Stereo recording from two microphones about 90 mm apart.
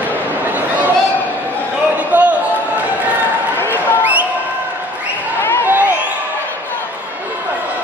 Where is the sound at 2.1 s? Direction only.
20° right (ahead or behind).